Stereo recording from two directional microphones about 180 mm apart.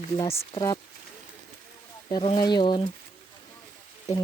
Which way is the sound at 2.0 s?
25° left (ahead or behind).